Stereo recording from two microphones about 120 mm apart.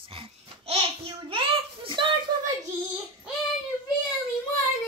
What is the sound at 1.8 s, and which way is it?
Speech, 45° right (ahead or behind).